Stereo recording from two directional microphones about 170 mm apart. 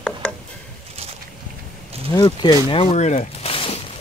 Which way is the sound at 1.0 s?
35° right (ahead or behind).